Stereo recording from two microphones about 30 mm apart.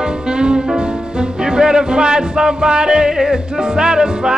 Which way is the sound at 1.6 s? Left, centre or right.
Right.